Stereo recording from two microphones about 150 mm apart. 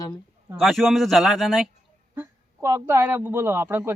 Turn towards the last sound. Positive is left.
turn(degrees=-15)  # may be behind; listen again after turning